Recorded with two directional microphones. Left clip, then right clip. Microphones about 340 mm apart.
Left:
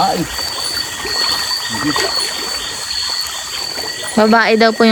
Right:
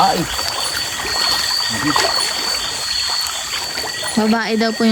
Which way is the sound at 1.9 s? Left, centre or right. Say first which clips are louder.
Even; centre.